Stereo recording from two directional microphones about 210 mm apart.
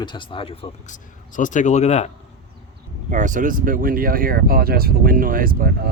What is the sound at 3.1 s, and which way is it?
Speech, 35° right (ahead or behind).